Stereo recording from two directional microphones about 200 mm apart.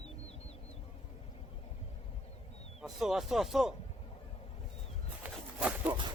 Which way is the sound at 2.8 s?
Centre (ahead or behind).